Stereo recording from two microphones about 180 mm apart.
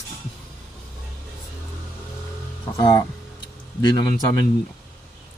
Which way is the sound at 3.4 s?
25° left (ahead or behind).